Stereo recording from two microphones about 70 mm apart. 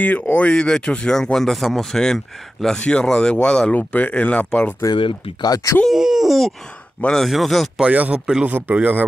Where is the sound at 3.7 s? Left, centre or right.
Left.